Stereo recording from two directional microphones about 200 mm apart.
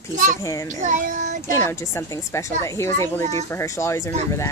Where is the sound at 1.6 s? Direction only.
15° left (ahead or behind).